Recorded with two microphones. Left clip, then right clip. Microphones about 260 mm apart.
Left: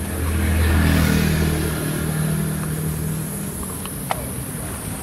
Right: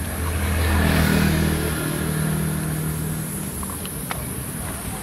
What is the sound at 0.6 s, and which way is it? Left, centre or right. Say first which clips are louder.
Vehicle: even; right.